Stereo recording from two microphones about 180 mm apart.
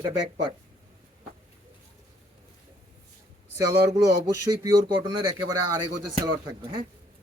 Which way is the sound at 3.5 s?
20° right (ahead or behind).